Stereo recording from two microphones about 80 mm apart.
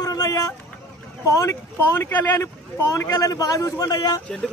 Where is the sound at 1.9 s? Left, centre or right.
Left.